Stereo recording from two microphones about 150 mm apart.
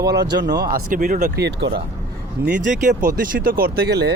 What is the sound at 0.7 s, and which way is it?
Speech, 70° right (ahead or behind).